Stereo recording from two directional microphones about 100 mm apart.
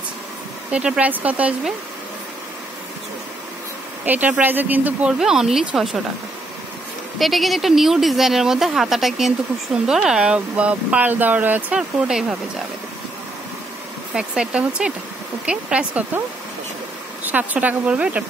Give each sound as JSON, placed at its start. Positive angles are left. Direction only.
{"t": 0.7, "sound": "speech", "side_deg": -10}
{"t": 4.0, "sound": "speech", "side_deg": -15}
{"t": 5.2, "sound": "speech", "side_deg": -5}
{"t": 7.2, "sound": "speech", "side_deg": 0}
{"t": 14.1, "sound": "speech", "side_deg": -10}
{"t": 17.2, "sound": "speech", "side_deg": -15}